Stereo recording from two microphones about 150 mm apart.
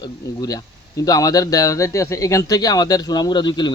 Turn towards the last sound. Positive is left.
turn(degrees=30)  # may be behind; listen again after turning